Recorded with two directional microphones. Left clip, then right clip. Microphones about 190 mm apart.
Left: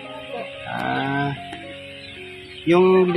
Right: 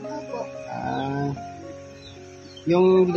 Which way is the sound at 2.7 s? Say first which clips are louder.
Left 3 dB; 10° left (ahead or behind).